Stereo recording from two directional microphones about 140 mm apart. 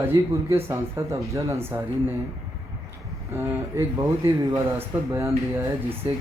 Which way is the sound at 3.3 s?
20° right (ahead or behind).